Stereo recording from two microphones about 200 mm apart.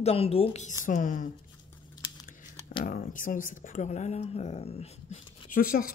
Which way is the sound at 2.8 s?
45° left (ahead or behind).